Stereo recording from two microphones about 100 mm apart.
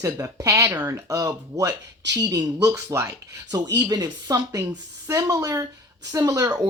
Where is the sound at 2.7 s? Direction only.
25° right (ahead or behind).